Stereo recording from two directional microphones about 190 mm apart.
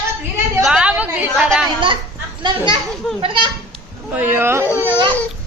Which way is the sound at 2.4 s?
25° right (ahead or behind).